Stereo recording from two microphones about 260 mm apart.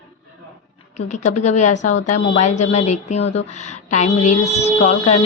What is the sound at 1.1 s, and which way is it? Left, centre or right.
Speech, left.